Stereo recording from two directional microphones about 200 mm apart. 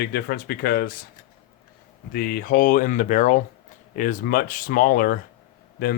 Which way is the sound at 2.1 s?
45° left (ahead or behind).